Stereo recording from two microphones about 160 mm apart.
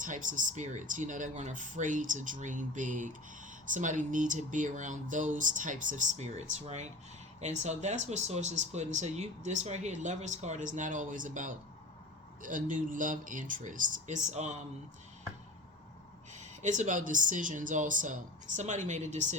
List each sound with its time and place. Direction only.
0.0 s speech: 55° right (ahead or behind)
16.3 s speech: 50° right (ahead or behind)